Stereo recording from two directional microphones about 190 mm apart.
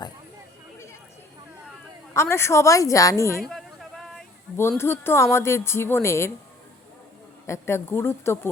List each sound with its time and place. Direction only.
2.1 s a woman's voice: 15° left (ahead or behind)
3.4 s a sound: centre (ahead or behind)
4.8 s a woman's voice: 10° left (ahead or behind)
7.4 s a woman's voice: 15° left (ahead or behind)